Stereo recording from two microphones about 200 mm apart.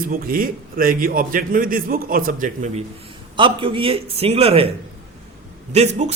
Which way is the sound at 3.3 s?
25° right (ahead or behind).